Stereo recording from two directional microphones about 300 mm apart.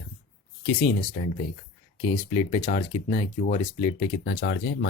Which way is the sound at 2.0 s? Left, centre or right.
Centre.